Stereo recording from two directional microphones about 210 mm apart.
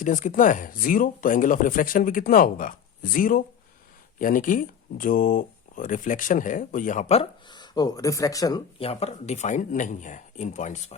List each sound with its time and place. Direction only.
0.0 s speech: 40° left (ahead or behind)